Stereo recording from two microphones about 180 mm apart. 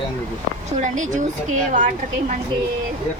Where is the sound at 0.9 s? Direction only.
45° right (ahead or behind).